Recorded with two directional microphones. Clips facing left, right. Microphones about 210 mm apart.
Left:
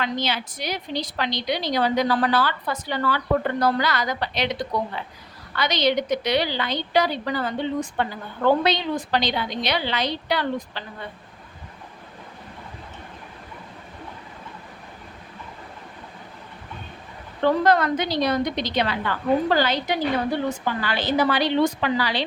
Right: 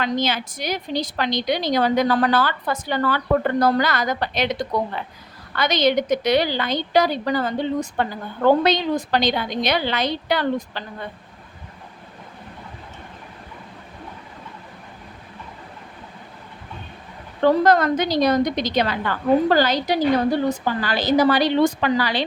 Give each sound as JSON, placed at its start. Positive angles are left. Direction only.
{"t": 0.0, "sound": "a woman's voice", "side_deg": -45}
{"t": 17.4, "sound": "a woman's voice", "side_deg": -45}